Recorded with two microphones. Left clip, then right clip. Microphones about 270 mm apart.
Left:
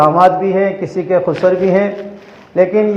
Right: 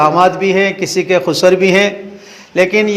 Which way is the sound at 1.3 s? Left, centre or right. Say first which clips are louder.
Right 5 dB; right.